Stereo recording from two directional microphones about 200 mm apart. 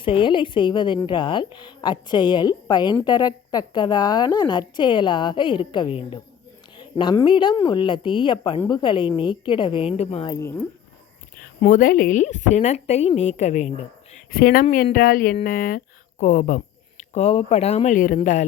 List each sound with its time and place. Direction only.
0.0 s speech: 25° left (ahead or behind)
11.4 s a woman's voice: 45° left (ahead or behind)
14.3 s a woman's voice: 50° left (ahead or behind)